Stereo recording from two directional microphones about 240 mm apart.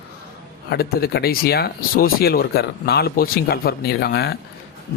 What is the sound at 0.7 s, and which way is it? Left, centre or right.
Speech, left.